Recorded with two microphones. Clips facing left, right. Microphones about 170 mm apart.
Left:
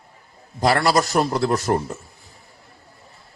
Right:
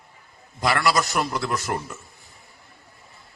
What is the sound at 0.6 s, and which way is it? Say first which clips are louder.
A man's voice: left 4 dB; 30° left (ahead or behind).